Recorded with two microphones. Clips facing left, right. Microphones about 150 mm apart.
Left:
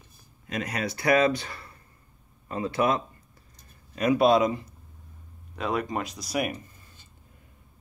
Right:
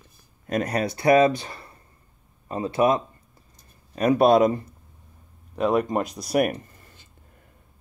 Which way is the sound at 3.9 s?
45° right (ahead or behind).